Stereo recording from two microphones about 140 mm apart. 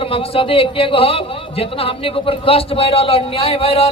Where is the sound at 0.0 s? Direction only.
40° left (ahead or behind).